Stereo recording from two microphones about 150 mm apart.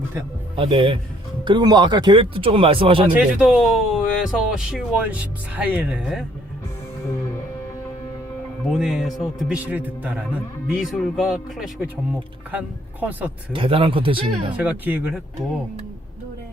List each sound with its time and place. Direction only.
0.5 s speech: 35° right (ahead or behind)
3.2 s a man's voice: 5° right (ahead or behind)
8.7 s a man's voice: centre (ahead or behind)
13.5 s speech: 35° right (ahead or behind)
14.5 s speech: 10° right (ahead or behind)